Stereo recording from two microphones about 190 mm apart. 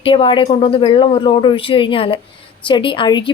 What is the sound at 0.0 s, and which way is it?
Speech, 25° left (ahead or behind).